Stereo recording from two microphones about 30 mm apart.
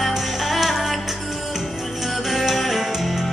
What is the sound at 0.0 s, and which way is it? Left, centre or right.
Music, centre.